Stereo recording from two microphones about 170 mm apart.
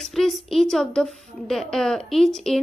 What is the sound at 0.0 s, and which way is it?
Speech, centre (ahead or behind).